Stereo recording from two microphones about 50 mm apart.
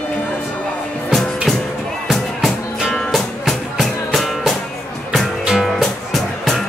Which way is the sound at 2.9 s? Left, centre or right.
Centre.